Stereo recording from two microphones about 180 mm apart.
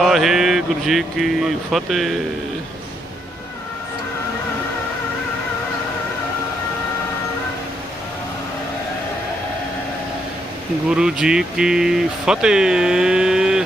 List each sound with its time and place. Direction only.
0.0 s speech: centre (ahead or behind)
10.8 s speech: 5° right (ahead or behind)